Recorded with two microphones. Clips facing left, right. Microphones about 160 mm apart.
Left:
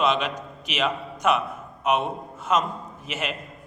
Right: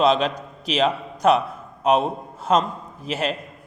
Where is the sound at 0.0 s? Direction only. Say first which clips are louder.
Right 5 dB; 35° right (ahead or behind).